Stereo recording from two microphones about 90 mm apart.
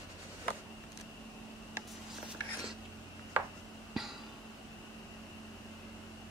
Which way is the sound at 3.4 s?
20° right (ahead or behind).